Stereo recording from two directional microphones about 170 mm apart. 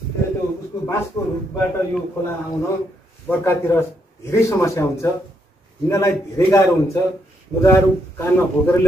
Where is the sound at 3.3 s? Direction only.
15° left (ahead or behind).